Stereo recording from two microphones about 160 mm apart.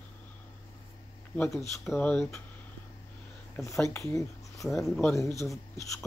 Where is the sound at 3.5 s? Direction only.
15° left (ahead or behind).